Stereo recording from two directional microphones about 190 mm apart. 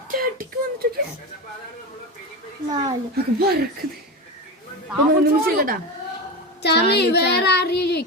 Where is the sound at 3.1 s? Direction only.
55° right (ahead or behind).